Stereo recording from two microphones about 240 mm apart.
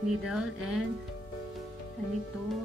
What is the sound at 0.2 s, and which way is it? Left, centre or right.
Speech, centre.